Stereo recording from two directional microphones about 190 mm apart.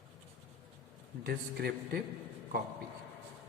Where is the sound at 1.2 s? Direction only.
55° right (ahead or behind).